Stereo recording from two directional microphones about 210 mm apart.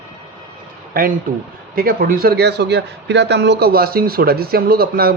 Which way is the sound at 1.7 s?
45° right (ahead or behind).